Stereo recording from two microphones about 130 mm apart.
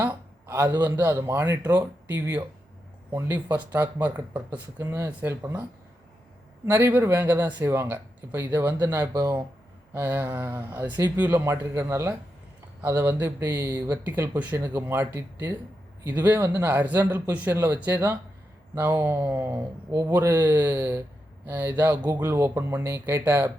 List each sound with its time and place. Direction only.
0.0 s speech: 20° right (ahead or behind)
3.1 s speech: 15° right (ahead or behind)
6.7 s speech: 15° right (ahead or behind)